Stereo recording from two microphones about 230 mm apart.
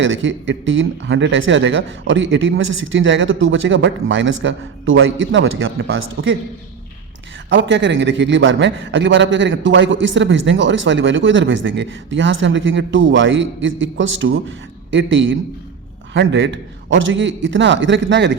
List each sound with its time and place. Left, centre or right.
0.0 s speech: right
7.5 s a man's voice: right